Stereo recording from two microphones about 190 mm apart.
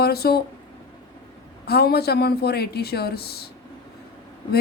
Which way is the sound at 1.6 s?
55° left (ahead or behind).